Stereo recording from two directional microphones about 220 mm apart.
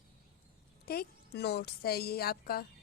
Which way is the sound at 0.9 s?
45° left (ahead or behind).